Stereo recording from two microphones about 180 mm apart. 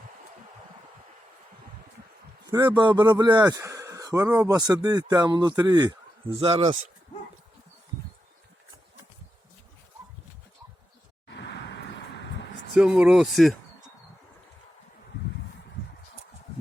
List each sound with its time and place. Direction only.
2.5 s speech: 20° right (ahead or behind)
11.3 s vehicle: 75° left (ahead or behind)
12.7 s speech: 5° right (ahead or behind)